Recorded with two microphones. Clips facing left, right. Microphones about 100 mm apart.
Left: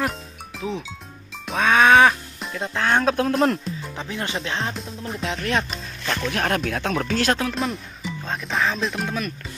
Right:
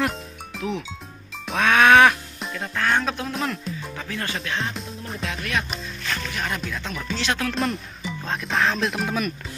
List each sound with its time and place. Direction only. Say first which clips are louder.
0.0 s music: right 1 dB; centre (ahead or behind)
2.6 s speech: left 2 dB; 25° left (ahead or behind)
3.0 s a man's voice: left 6 dB; 50° left (ahead or behind)
3.9 s speech: left 3 dB; 20° left (ahead or behind)
4.7 s speech: left 2 dB; centre (ahead or behind)
5.2 s speech: left 4 dB; 30° left (ahead or behind)
6.3 s speech: left 6 dB; 65° left (ahead or behind)
7.5 s speech: right 1 dB; centre (ahead or behind)